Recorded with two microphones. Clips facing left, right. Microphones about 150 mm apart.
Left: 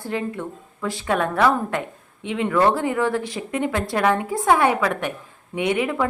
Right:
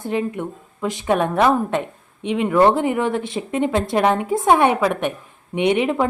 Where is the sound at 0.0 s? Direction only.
20° right (ahead or behind).